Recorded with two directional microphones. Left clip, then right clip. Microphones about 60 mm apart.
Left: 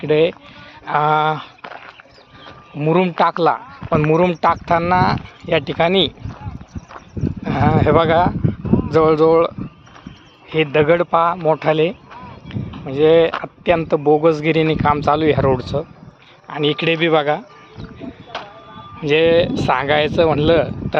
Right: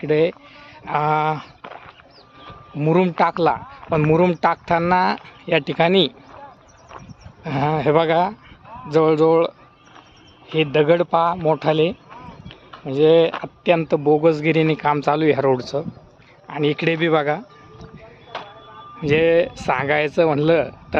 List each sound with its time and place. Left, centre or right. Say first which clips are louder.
0.0 s a man's voice: left 3 dB; right
0.9 s speech: left 4 dB; centre
2.7 s a man's voice: left 2 dB; right
4.0 s speech: left 2 dB; right
4.9 s speech: left 2 dB; right
7.6 s a man's voice: left 3 dB; right
10.5 s speech: left 2 dB; right
13.9 s a man's voice: left 4 dB; right
14.7 s speech: left 3 dB; right
15.7 s a man's voice: left 2 dB; right
16.9 s speech: left 4 dB; centre
17.2 s a man's voice: left 3 dB; right
19.1 s speech: left 3 dB; centre; by 20.7 s right